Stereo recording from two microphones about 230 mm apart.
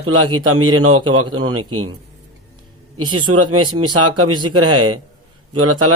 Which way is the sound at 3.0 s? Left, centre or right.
Centre.